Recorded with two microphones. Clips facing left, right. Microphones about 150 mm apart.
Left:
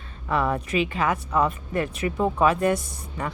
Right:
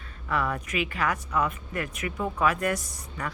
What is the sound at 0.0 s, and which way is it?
A woman's voice, 25° left (ahead or behind).